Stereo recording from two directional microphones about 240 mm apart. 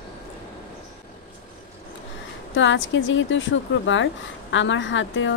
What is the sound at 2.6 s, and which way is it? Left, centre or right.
Speech, left.